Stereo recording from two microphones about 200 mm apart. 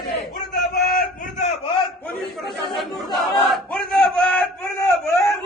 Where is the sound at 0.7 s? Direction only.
50° left (ahead or behind).